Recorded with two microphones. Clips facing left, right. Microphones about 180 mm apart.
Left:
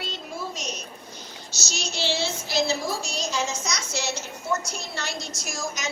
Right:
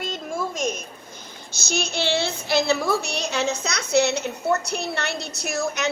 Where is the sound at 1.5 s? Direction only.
55° right (ahead or behind).